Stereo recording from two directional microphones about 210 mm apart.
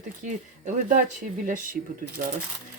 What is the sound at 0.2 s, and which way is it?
Speech, 35° right (ahead or behind).